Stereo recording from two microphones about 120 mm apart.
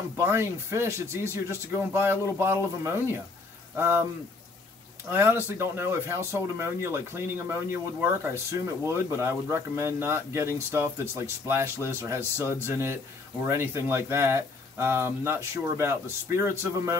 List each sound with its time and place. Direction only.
0.1 s speech: 20° right (ahead or behind)
5.1 s speech: 20° right (ahead or behind)
12.2 s speech: 20° left (ahead or behind)
12.5 s speech: 20° right (ahead or behind)